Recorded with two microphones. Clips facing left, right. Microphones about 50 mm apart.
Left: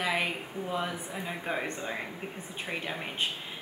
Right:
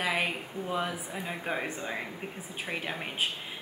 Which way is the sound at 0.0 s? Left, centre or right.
Centre.